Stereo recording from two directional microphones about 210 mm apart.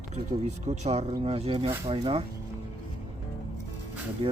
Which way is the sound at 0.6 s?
35° right (ahead or behind).